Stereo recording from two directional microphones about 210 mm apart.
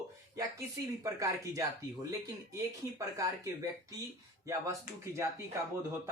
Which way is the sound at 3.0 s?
15° right (ahead or behind).